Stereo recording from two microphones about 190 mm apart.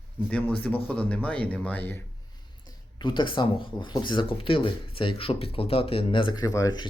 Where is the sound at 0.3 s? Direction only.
10° left (ahead or behind).